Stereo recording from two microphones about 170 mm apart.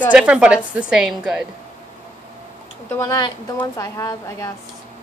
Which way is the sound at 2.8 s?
20° left (ahead or behind).